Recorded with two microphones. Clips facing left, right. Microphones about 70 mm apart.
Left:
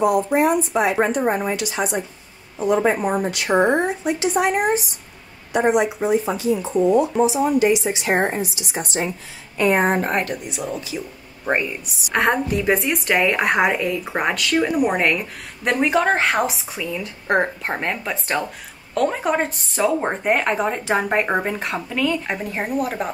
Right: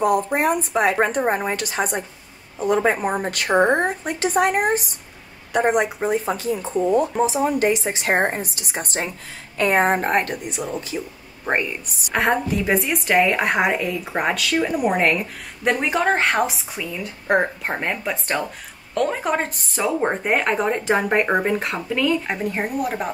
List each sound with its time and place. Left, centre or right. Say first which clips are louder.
0.0 s speech: left 2 dB; right
12.1 s speech: left 1 dB; centre